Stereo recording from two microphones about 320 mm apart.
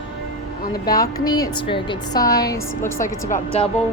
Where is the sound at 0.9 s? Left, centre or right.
Centre.